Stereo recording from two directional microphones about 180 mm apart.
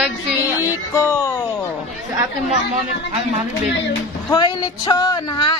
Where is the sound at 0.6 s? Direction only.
15° left (ahead or behind).